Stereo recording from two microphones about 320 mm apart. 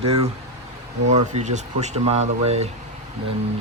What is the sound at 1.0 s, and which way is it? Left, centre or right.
Speech, right.